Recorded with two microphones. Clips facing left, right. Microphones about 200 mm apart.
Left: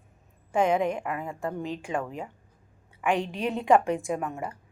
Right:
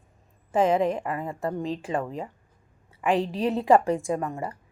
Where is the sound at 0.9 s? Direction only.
30° right (ahead or behind).